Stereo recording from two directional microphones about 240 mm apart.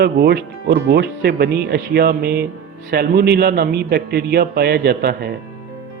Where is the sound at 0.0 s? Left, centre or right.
Right.